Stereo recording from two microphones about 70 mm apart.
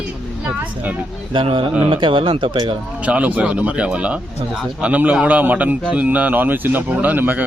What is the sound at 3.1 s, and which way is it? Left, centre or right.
Speech, right.